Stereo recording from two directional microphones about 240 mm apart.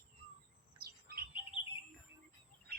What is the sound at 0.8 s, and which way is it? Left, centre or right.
Bird, right.